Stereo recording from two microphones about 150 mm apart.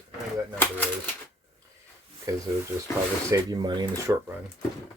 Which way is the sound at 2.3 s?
20° right (ahead or behind).